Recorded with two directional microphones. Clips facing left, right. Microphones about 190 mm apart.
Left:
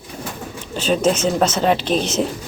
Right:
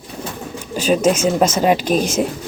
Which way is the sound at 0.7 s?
10° right (ahead or behind).